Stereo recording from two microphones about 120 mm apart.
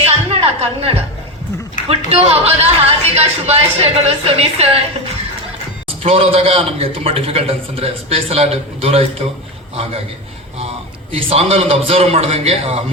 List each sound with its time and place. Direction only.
0.0 s music: 55° right (ahead or behind)
2.0 s speech: 55° right (ahead or behind)
6.0 s a man's voice: 55° right (ahead or behind)
11.1 s speech: 55° right (ahead or behind)